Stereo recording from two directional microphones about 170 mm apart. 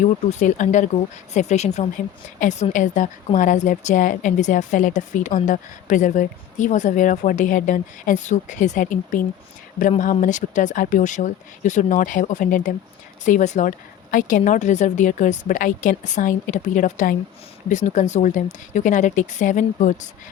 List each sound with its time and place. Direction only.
0.0 s a woman's voice: 45° left (ahead or behind)